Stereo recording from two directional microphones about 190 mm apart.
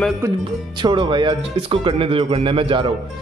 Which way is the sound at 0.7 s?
25° right (ahead or behind).